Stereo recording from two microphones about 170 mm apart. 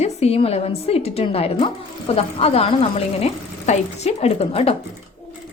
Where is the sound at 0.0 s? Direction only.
40° left (ahead or behind).